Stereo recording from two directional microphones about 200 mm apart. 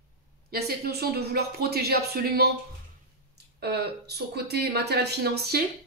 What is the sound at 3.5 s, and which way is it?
Speech, 55° right (ahead or behind).